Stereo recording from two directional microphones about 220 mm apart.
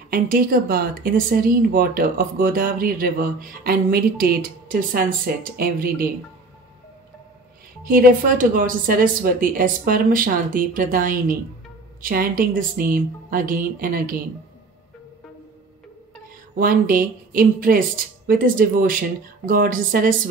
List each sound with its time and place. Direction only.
0.1 s speech: 40° right (ahead or behind)
7.8 s speech: 40° right (ahead or behind)
16.5 s speech: 40° right (ahead or behind)